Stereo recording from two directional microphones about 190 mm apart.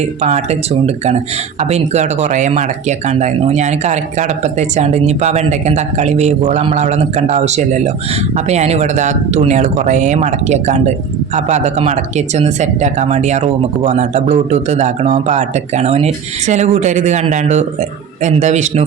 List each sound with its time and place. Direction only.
0.0 s speech: 35° right (ahead or behind)
1.5 s speech: 35° right (ahead or behind)